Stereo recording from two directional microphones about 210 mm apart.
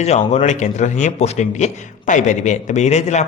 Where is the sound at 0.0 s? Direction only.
30° left (ahead or behind).